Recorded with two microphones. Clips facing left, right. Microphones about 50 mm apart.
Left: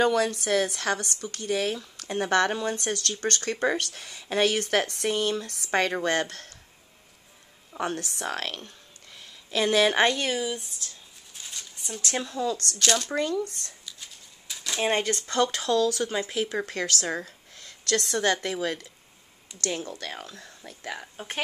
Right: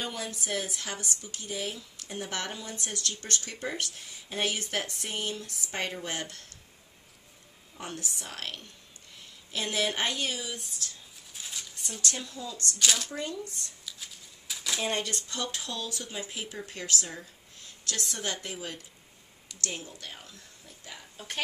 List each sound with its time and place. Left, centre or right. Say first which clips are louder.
0.0 s speech: left 13 dB; left
7.7 s speech: left 8 dB; left
9.5 s speech: left 9 dB; left
10.1 s speech: left 5 dB; left
10.4 s speech: left 7 dB; centre
11.3 s a sound: even; centre
12.0 s speech: left 5 dB; left
12.7 s speech: even; centre
13.1 s speech: left 9 dB; left
13.5 s speech: left 1 dB; left
13.8 s a sound: even; centre
14.8 s speech: left 8 dB; left
15.2 s speech: left 11 dB; left
19.6 s speech: left 7 dB; left